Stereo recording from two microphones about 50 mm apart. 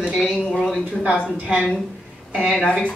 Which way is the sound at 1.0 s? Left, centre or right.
Centre.